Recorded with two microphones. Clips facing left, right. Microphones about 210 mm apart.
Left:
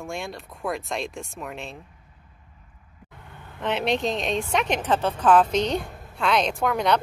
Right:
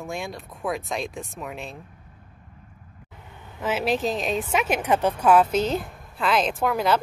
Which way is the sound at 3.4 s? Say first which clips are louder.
Even; 5° right (ahead or behind).